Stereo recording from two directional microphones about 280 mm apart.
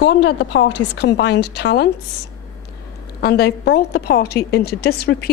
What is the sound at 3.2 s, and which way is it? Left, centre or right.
A woman's voice, left.